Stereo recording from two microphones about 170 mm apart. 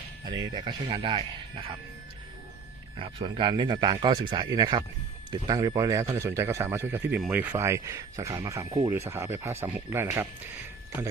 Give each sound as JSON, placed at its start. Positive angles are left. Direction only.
{"t": 0.3, "sound": "speech", "side_deg": -25}
{"t": 3.0, "sound": "speech", "side_deg": -30}